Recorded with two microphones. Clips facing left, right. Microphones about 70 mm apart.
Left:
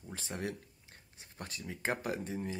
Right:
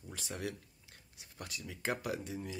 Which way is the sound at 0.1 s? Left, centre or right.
Left.